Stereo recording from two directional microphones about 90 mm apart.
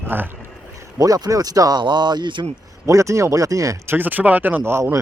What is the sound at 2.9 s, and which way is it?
Speech, 35° right (ahead or behind).